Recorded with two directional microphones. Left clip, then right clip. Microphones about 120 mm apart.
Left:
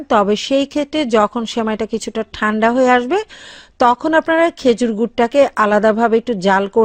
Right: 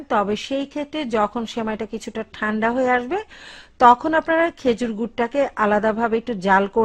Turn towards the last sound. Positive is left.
turn(degrees=35)  # may be behind; listen again after turning